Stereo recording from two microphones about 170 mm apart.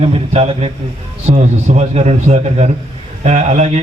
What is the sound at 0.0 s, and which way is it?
A man's voice, 35° right (ahead or behind).